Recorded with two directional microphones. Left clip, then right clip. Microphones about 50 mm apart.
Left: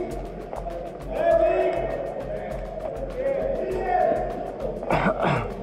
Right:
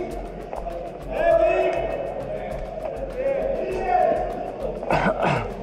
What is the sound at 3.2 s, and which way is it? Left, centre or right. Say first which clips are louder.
Music: right 1 dB; centre.